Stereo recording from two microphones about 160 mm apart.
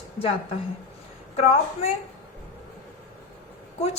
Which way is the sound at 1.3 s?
40° left (ahead or behind).